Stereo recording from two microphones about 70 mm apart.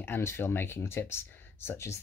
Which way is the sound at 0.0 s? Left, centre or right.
Left.